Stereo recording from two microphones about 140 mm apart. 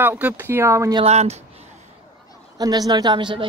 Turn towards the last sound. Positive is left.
turn(degrees=-35)  # may be behind; listen again after turning